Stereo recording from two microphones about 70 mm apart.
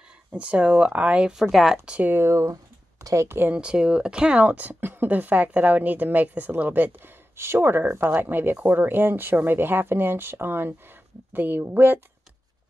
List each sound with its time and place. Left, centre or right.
0.3 s speech: centre
2.0 s speech: right
2.3 s a sound: right
3.3 s speech: right
3.5 s speech: centre